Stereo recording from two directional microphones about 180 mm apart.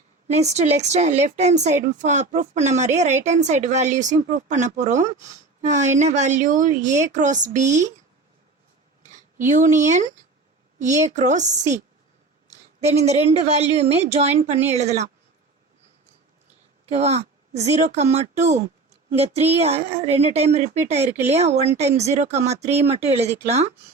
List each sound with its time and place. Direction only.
0.3 s a woman's voice: 40° right (ahead or behind)
9.5 s a woman's voice: 45° right (ahead or behind)
16.8 s a woman's voice: 35° right (ahead or behind)